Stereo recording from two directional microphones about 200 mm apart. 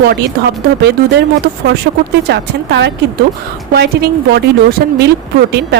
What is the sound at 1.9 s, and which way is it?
A woman's voice, 50° right (ahead or behind).